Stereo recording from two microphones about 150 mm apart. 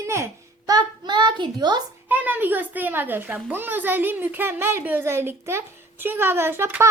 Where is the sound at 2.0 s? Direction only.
10° right (ahead or behind).